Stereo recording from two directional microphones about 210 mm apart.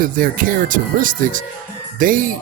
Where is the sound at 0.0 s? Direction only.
40° right (ahead or behind).